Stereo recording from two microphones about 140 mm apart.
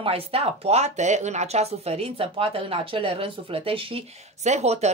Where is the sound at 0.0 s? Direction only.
45° right (ahead or behind).